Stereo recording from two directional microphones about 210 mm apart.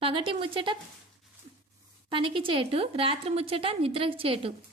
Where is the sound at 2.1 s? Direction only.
25° right (ahead or behind).